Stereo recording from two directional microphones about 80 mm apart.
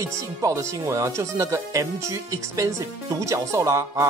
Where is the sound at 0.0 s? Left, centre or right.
Right.